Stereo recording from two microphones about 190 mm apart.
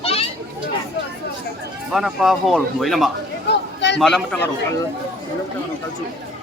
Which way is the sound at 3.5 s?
65° left (ahead or behind).